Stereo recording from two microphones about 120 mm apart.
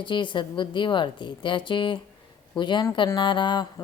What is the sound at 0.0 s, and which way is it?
Speech, 40° left (ahead or behind).